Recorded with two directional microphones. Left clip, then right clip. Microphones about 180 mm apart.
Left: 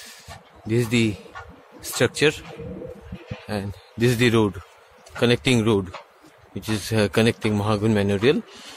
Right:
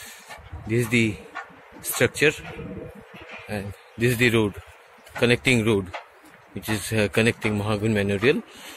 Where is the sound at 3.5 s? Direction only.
25° left (ahead or behind).